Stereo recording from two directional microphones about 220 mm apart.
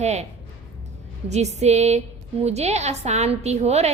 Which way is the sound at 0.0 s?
30° right (ahead or behind).